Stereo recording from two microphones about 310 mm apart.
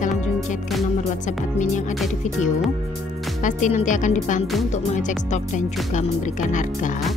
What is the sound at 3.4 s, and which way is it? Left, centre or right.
Speech, left.